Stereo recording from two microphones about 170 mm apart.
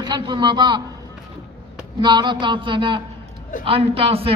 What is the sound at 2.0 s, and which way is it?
A man's voice, 25° right (ahead or behind).